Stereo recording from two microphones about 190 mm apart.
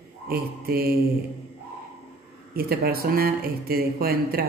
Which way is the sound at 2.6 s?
55° right (ahead or behind).